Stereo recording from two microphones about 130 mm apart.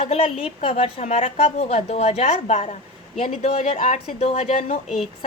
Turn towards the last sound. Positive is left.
turn(degrees=0)  # may be behind; listen again after turning